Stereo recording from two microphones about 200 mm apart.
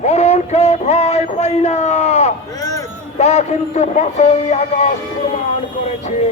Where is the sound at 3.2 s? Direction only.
35° left (ahead or behind).